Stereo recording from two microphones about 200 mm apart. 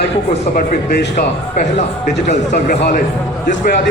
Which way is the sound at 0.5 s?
45° left (ahead or behind).